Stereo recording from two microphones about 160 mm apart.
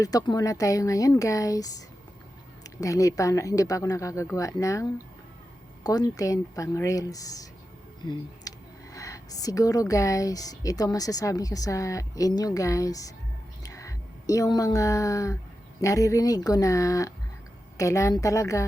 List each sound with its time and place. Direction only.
0.0 s speech: 25° left (ahead or behind)
2.8 s speech: 20° left (ahead or behind)